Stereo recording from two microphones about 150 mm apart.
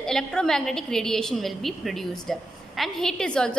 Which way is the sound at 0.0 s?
5° left (ahead or behind).